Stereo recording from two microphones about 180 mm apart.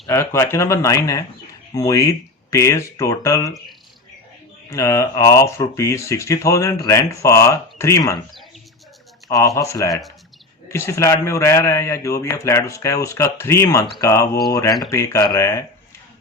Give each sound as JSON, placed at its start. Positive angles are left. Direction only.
{"t": 0.1, "sound": "speech", "side_deg": 15}
{"t": 4.7, "sound": "speech", "side_deg": 15}
{"t": 9.6, "sound": "speech", "side_deg": 15}